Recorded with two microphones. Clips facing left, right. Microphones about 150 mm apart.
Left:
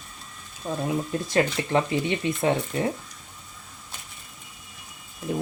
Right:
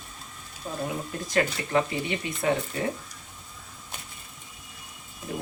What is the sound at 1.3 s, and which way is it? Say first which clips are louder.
Speech: left 2 dB; 25° left (ahead or behind).